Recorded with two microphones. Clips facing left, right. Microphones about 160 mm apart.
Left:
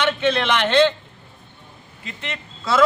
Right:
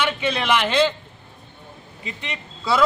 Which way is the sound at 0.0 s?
10° right (ahead or behind).